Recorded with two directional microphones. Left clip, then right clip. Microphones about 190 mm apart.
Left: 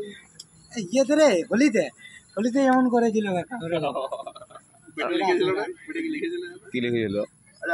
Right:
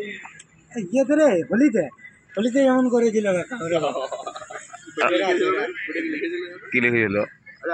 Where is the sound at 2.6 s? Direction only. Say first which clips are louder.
Right 2 dB; 10° left (ahead or behind).